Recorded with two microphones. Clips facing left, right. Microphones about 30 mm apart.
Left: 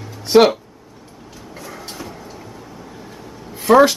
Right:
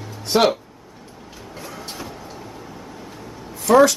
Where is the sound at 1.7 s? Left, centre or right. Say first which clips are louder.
Left 1 dB; centre.